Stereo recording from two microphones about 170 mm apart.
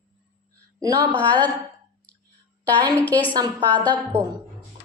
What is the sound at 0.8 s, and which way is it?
Speech, 25° right (ahead or behind).